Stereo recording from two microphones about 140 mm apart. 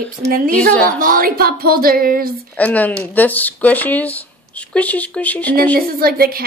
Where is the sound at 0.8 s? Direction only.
85° right.